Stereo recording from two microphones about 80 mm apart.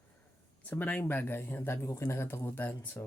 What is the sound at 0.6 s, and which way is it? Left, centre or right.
Speech, centre.